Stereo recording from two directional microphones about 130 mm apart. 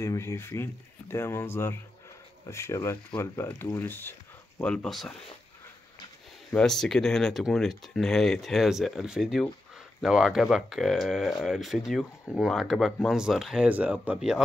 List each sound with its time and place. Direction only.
0.0 s speech: 25° left (ahead or behind); by 5.1 s centre (ahead or behind)
6.5 s speech: 5° left (ahead or behind)